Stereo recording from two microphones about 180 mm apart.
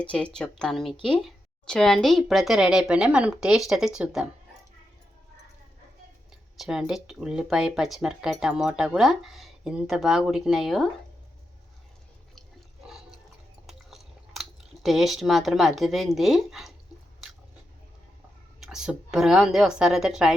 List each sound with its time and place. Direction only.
0.0 s speech: 5° left (ahead or behind)
6.6 s speech: 5° right (ahead or behind)
12.3 s water: centre (ahead or behind)
13.7 s biting: centre (ahead or behind)
14.8 s speech: centre (ahead or behind)
18.6 s speech: 5° right (ahead or behind)